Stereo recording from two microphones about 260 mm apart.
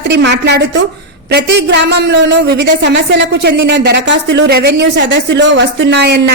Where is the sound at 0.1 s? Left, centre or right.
Right.